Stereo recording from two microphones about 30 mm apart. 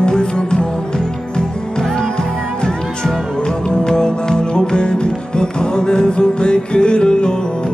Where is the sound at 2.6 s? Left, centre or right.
Left.